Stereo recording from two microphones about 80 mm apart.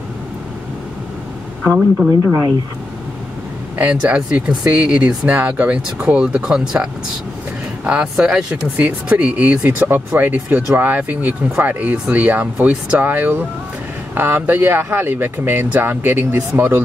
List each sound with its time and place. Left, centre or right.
1.6 s speech: centre
3.7 s speech: centre